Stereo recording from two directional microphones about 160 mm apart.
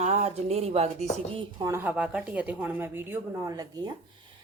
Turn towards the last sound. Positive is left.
turn(degrees=-20)  # may be behind; listen again after turning